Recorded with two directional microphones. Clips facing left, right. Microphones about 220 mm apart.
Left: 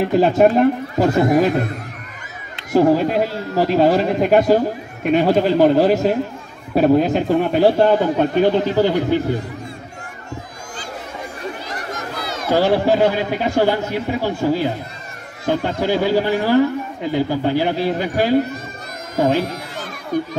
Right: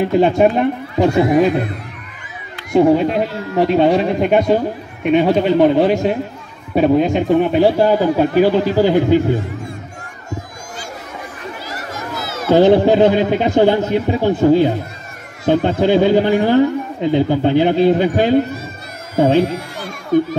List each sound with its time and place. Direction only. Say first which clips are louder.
0.0 s a man's voice: right 1 dB; centre (ahead or behind)
2.7 s a man's voice: right 2 dB; centre (ahead or behind); by 9.2 s 15° right (ahead or behind)
12.5 s a man's voice: right 5 dB; 20° right (ahead or behind)